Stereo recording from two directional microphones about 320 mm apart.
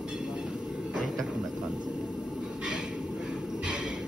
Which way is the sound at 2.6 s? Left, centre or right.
Centre.